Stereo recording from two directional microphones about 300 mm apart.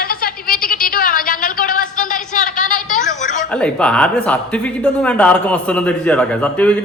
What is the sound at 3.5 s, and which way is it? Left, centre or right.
A man's voice, centre.